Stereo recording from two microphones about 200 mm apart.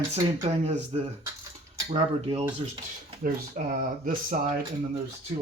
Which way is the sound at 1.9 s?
30° right (ahead or behind).